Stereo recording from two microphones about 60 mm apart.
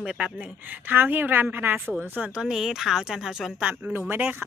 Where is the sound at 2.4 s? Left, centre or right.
Centre.